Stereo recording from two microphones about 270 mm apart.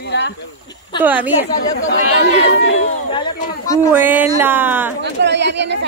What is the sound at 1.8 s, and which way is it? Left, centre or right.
Speech, left.